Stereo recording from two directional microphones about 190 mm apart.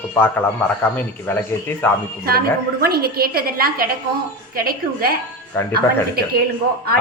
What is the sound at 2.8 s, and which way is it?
A woman's voice, 55° right (ahead or behind).